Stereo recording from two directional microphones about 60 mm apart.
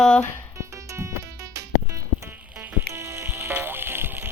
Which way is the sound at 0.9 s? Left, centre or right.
Right.